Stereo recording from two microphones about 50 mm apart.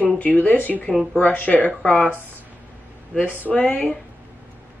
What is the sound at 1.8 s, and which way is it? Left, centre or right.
Speech, centre.